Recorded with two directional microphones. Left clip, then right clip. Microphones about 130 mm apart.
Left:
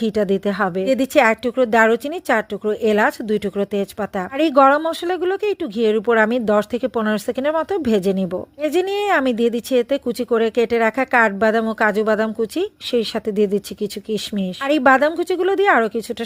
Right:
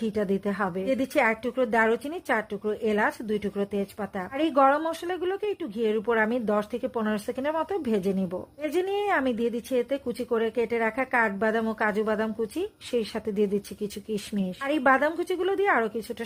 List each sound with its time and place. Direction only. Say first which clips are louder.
0.0 s speech: left 9 dB; 35° left (ahead or behind)